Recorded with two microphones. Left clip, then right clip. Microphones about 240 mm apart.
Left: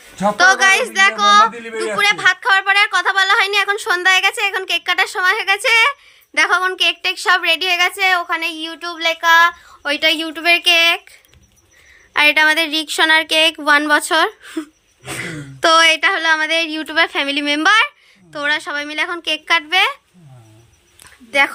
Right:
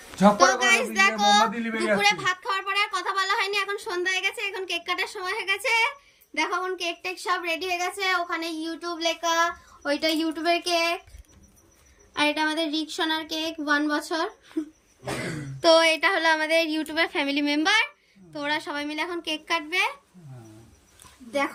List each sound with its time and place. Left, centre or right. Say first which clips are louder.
0.3 s a woman's voice: left 13 dB; centre
1.6 s a woman's voice: left 3 dB; left
2.0 s a woman's voice: left 13 dB; centre
7.6 s child singing: left 12 dB; centre
12.1 s child singing: left 12 dB; centre
15.6 s a woman's voice: left 7 dB; centre